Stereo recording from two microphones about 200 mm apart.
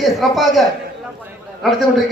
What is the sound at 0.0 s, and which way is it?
Speech, centre (ahead or behind).